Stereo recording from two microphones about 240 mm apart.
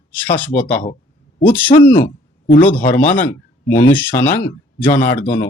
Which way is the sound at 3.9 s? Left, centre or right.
Centre.